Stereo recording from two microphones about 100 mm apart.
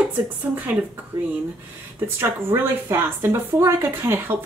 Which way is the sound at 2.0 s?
25° right (ahead or behind).